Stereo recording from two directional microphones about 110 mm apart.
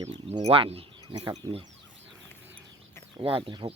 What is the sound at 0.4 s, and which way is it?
Speech, 60° right (ahead or behind).